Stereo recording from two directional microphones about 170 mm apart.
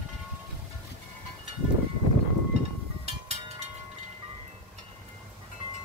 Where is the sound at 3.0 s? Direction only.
35° right (ahead or behind).